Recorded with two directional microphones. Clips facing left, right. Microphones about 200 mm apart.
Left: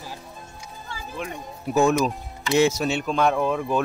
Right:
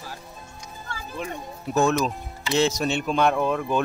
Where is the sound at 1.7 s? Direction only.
10° left (ahead or behind).